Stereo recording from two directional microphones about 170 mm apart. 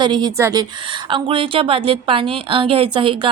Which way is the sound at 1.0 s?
30° right (ahead or behind).